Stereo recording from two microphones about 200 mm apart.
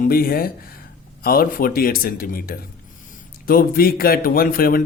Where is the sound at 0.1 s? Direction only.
45° left (ahead or behind).